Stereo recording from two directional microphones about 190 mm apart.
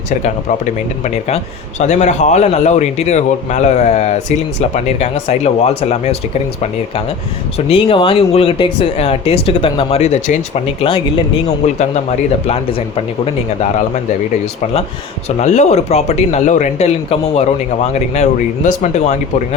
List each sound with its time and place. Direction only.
0.2 s speech: 40° left (ahead or behind)
7.7 s speech: 30° left (ahead or behind)
15.4 s speech: 35° left (ahead or behind)